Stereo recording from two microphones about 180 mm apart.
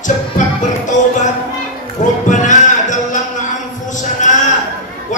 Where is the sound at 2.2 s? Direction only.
45° left (ahead or behind).